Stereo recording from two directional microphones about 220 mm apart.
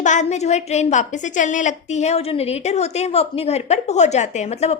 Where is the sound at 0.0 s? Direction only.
35° left (ahead or behind).